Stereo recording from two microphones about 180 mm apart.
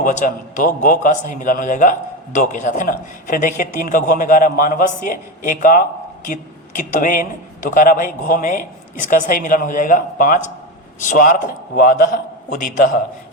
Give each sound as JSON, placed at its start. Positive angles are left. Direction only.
{"t": 0.0, "sound": "a man's voice", "side_deg": 45}